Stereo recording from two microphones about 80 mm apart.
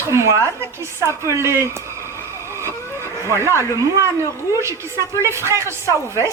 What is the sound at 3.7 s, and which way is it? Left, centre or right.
A woman's voice, right.